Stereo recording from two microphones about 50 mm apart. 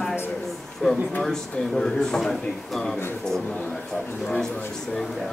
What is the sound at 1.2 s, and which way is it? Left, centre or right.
A woman's voice, centre.